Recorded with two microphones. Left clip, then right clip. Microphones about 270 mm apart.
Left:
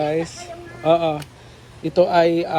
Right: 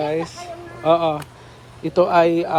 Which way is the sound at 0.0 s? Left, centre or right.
Centre.